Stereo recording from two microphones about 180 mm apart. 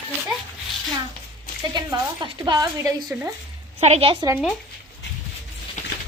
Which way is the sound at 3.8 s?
35° right (ahead or behind).